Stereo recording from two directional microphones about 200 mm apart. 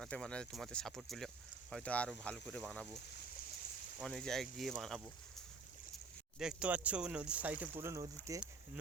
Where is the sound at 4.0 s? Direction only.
Centre (ahead or behind).